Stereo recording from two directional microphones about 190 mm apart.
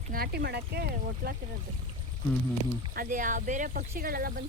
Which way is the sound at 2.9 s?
45° right (ahead or behind).